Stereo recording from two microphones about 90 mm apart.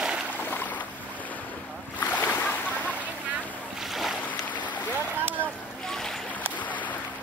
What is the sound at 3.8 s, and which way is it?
Boat, centre (ahead or behind).